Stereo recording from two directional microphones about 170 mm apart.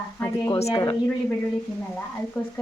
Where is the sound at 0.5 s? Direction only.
30° left (ahead or behind).